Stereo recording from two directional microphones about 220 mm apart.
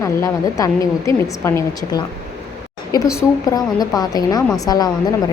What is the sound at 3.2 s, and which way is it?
A woman's voice, 15° left (ahead or behind).